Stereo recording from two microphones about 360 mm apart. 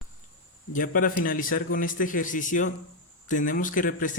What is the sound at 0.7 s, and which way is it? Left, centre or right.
Speech, left.